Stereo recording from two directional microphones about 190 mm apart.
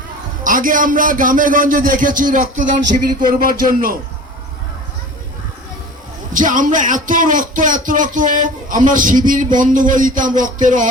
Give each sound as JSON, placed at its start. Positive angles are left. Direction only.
{"t": 0.4, "sound": "speech", "side_deg": -45}
{"t": 6.3, "sound": "speech", "side_deg": -45}